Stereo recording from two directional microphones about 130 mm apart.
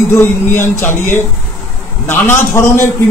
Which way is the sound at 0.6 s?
20° left (ahead or behind).